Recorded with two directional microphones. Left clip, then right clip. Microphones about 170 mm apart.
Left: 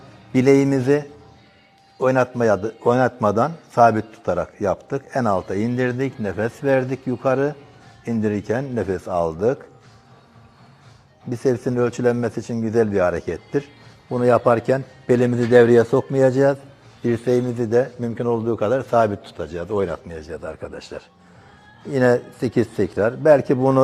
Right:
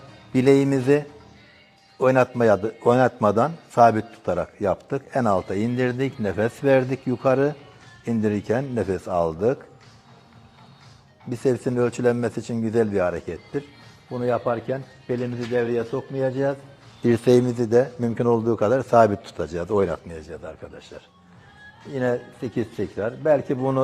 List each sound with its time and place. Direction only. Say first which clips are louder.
0.3 s a man's voice: left 2 dB; centre (ahead or behind)
11.3 s a man's voice: left 2 dB; centre (ahead or behind)
14.1 s a man's voice: left 7 dB; 20° left (ahead or behind)
17.0 s a man's voice: right 2 dB; 20° right (ahead or behind)
17.4 s a man's voice: even; 10° right (ahead or behind)
20.4 s a man's voice: left 6 dB; 20° left (ahead or behind)